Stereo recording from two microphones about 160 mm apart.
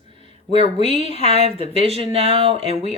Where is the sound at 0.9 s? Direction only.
35° right (ahead or behind).